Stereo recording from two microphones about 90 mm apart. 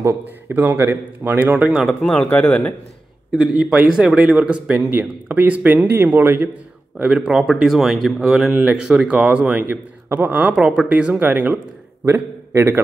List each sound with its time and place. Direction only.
0.5 s speech: 20° right (ahead or behind)
1.7 s speech: 5° right (ahead or behind)
2.0 s speech: 10° left (ahead or behind)
3.3 s speech: 5° right (ahead or behind); by 6.5 s 25° right (ahead or behind)
7.0 s speech: 10° right (ahead or behind)
12.1 s a man's voice: 25° right (ahead or behind)